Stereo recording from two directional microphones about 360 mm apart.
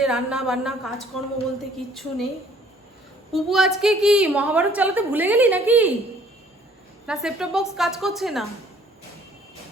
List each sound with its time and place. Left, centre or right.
0.0 s a woman's voice: centre
3.3 s a woman's voice: centre
7.1 s a woman's voice: centre